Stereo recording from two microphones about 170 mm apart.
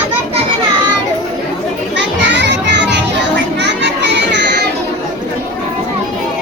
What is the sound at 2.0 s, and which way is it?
Children playing, 90° right.